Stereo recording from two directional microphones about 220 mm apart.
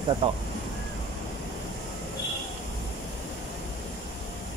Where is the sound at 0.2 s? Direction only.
25° right (ahead or behind).